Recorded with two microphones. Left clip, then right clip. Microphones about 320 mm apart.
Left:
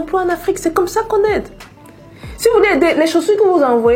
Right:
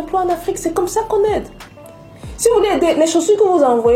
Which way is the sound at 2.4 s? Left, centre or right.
Left.